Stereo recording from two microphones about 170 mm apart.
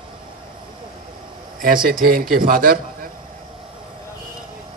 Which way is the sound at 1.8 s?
60° right (ahead or behind).